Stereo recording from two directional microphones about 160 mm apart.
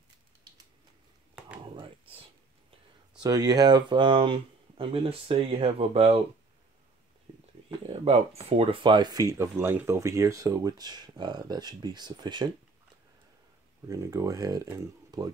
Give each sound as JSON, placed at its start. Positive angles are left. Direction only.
{"t": 1.8, "sound": "a sound", "side_deg": -35}
{"t": 3.2, "sound": "speech", "side_deg": -25}
{"t": 7.9, "sound": "speech", "side_deg": -40}
{"t": 13.8, "sound": "speech", "side_deg": -20}